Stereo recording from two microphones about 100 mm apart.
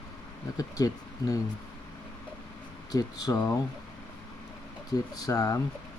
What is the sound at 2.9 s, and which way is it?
Speech, 35° left (ahead or behind).